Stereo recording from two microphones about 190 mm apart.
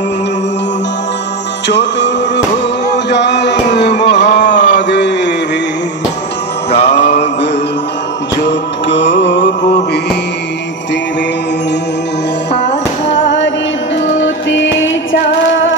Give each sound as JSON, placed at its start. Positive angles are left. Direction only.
{"t": 1.7, "sound": "music", "side_deg": 65}
{"t": 4.7, "sound": "a sound", "side_deg": 65}
{"t": 6.7, "sound": "music", "side_deg": 30}
{"t": 8.5, "sound": "music", "side_deg": 70}
{"t": 12.5, "sound": "music", "side_deg": 70}